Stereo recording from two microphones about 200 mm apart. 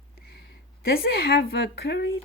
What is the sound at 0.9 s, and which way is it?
A woman's voice, 50° left (ahead or behind).